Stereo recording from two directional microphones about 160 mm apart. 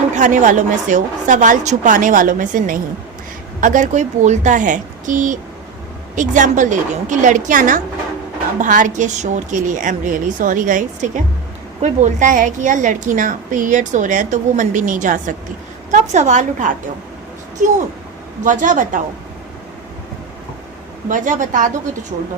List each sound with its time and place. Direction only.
0.2 s a woman's voice: 55° right (ahead or behind)
18.4 s a woman's voice: 55° right (ahead or behind)
21.1 s a woman's voice: 55° right (ahead or behind)